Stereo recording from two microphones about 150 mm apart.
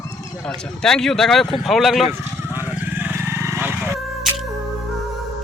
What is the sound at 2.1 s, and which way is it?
Vehicle, 15° right (ahead or behind).